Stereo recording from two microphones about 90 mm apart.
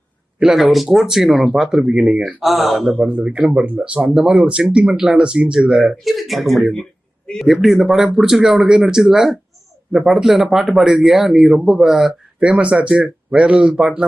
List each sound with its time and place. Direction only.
0.3 s speech: 5° right (ahead or behind)
3.1 s speech: 10° right (ahead or behind)